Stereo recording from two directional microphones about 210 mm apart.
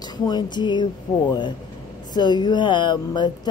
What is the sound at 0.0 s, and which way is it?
Speech, 20° left (ahead or behind).